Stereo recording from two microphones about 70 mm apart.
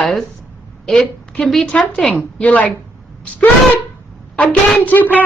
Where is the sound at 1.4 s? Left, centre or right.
Centre.